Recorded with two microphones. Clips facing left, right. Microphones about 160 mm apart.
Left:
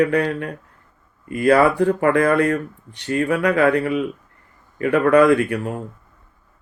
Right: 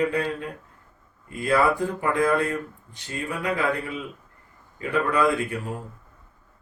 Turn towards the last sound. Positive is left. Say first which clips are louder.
# left 9 dB
turn(degrees=70)  # may be behind; listen again after turning